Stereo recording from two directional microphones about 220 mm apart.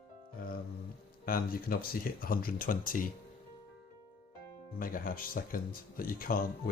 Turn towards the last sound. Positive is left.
turn(degrees=40)  # may be behind; listen again after turning